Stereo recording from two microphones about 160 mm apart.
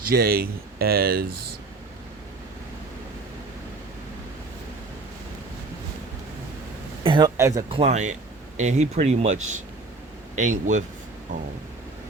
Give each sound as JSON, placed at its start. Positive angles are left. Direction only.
{"t": 0.1, "sound": "speech", "side_deg": -70}
{"t": 7.0, "sound": "a sound", "side_deg": -30}
{"t": 7.3, "sound": "speech", "side_deg": -15}
{"t": 7.7, "sound": "speech", "side_deg": -40}